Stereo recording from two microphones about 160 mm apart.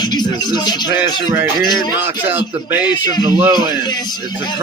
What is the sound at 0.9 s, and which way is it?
Music, 15° right (ahead or behind).